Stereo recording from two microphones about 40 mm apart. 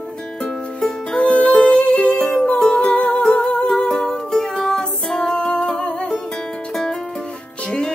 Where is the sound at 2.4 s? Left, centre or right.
Left; by 4.5 s centre.